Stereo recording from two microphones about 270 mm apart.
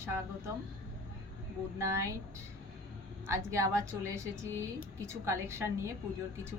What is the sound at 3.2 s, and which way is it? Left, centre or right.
A woman's voice, centre.